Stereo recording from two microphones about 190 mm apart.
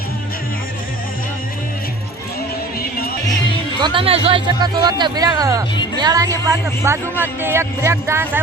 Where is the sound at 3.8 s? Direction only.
30° right (ahead or behind).